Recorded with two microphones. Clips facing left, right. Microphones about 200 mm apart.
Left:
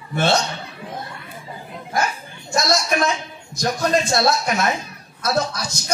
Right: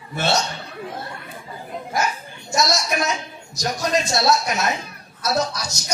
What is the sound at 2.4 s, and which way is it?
A man's voice, 55° left (ahead or behind).